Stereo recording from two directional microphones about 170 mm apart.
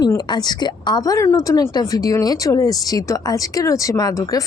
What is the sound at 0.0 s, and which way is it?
A woman's voice, 25° left (ahead or behind).